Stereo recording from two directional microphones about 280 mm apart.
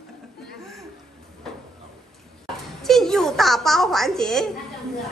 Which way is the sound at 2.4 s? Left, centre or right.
Centre.